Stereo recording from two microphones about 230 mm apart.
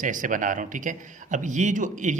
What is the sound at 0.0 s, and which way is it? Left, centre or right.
Speech, right.